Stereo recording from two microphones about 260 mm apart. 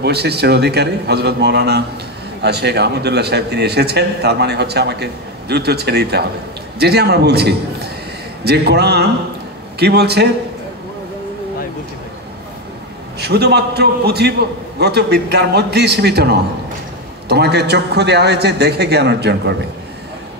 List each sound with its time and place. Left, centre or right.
0.0 s a man's voice: right
13.2 s a man's voice: right